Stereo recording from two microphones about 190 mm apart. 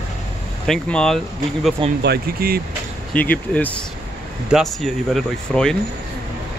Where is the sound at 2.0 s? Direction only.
55° right (ahead or behind).